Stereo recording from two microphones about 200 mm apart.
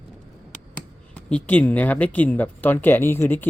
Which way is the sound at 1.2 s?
5° left (ahead or behind).